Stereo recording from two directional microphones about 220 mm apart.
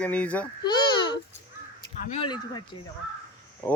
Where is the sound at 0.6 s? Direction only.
20° left (ahead or behind).